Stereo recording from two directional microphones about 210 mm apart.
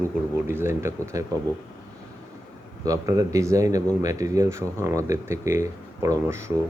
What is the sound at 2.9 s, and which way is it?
Speech, 15° right (ahead or behind).